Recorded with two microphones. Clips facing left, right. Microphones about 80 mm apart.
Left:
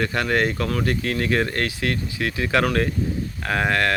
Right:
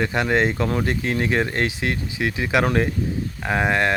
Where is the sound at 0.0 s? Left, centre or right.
Centre.